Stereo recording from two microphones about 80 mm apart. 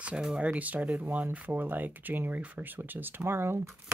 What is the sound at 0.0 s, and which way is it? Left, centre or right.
Speech, centre.